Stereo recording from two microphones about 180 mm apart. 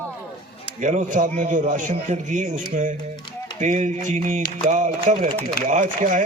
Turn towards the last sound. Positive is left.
turn(degrees=-45)  # may be behind; listen again after turning